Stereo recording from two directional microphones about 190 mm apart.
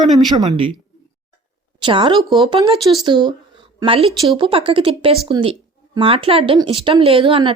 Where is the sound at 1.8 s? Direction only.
25° right (ahead or behind).